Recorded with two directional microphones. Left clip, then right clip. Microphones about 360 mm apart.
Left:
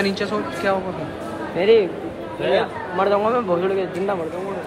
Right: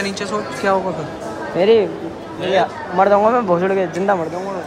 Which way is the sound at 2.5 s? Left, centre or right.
Right.